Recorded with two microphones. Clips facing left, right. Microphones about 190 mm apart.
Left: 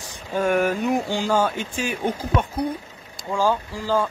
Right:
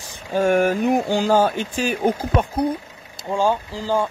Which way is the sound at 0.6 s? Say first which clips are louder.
Right 3 dB; 35° right (ahead or behind).